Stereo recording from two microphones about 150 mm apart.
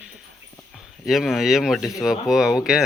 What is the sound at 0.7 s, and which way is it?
Speech, centre (ahead or behind).